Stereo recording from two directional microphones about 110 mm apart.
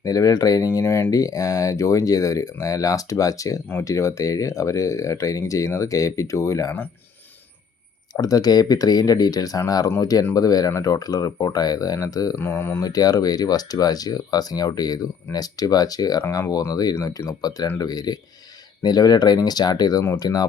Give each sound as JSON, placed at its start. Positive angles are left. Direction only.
{"t": 0.0, "sound": "speech", "side_deg": 35}
{"t": 8.1, "sound": "speech", "side_deg": 35}
{"t": 12.4, "sound": "speech", "side_deg": 20}
{"t": 12.8, "sound": "speech", "side_deg": 35}